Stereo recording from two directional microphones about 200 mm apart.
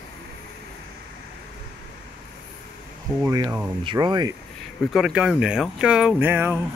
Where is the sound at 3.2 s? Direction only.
15° right (ahead or behind).